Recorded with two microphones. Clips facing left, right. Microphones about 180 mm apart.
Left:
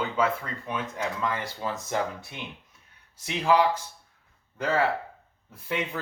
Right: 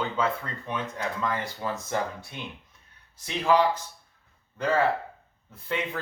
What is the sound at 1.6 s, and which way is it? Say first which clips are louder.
Speech: even; 20° left (ahead or behind).